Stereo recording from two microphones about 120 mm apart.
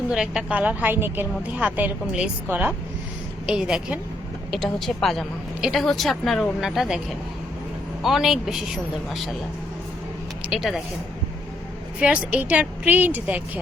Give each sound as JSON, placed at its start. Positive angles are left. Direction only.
{"t": 0.1, "sound": "a woman's voice", "side_deg": -5}
{"t": 8.0, "sound": "a woman's voice", "side_deg": 0}
{"t": 10.4, "sound": "speech", "side_deg": -5}
{"t": 11.9, "sound": "a woman's voice", "side_deg": -10}